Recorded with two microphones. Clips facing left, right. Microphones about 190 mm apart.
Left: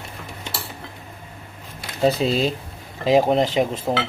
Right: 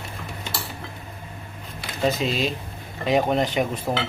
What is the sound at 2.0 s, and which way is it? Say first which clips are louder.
A man's voice: left 4 dB; 35° left (ahead or behind).